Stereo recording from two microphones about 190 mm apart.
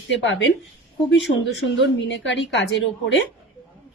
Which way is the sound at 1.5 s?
70° left (ahead or behind).